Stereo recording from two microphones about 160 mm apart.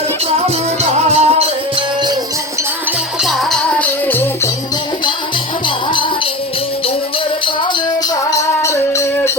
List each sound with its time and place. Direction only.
0.3 s music: 40° right (ahead or behind)
3.2 s music: centre (ahead or behind)
5.6 s music: 30° left (ahead or behind)
8.1 s music: 20° left (ahead or behind)